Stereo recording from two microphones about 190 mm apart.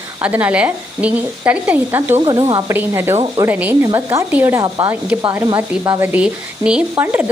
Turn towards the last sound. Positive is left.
turn(degrees=-5)  # may be behind; listen again after turning